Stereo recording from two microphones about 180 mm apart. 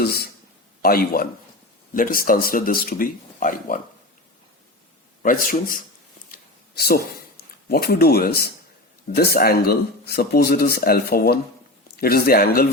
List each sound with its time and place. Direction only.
0.0 s speech: 60° left (ahead or behind)
5.2 s speech: 50° left (ahead or behind)
6.3 s a sound: 60° left (ahead or behind)
9.1 s speech: 60° left (ahead or behind)